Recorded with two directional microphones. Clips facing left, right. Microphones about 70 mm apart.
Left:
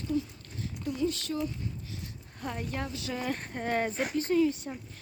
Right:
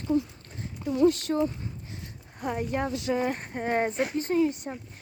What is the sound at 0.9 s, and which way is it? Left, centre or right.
Speech, right.